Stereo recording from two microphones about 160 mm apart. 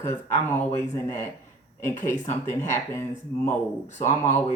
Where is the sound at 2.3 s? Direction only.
15° left (ahead or behind).